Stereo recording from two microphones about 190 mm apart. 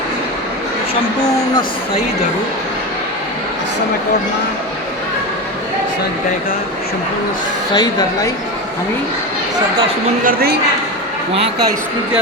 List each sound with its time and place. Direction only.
7.7 s a woman's voice: 20° left (ahead or behind)
10.2 s a woman's voice: 55° right (ahead or behind)